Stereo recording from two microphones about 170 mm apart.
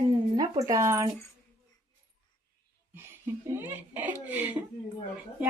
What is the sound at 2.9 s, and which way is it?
Speech, 15° right (ahead or behind).